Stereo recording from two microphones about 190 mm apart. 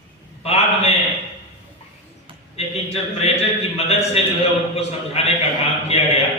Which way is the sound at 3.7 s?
35° left (ahead or behind).